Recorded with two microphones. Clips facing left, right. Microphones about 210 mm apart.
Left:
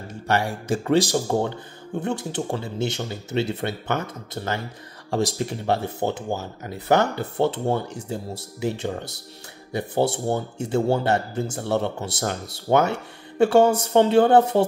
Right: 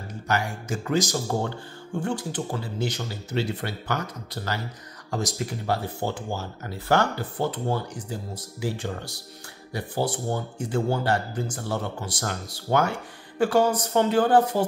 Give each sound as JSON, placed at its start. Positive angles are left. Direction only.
{"t": 0.3, "sound": "speech", "side_deg": 30}
{"t": 1.1, "sound": "speech", "side_deg": 20}